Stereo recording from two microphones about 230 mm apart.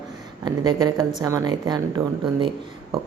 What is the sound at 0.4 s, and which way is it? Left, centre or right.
A woman's voice, centre.